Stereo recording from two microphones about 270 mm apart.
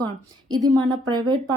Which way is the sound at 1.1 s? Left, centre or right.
Centre.